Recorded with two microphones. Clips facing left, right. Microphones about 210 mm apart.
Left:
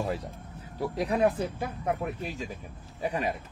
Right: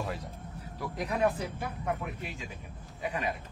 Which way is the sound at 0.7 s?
30° left (ahead or behind).